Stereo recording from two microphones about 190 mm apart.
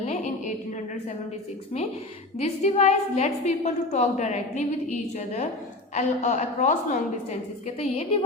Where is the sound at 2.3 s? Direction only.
35° left (ahead or behind).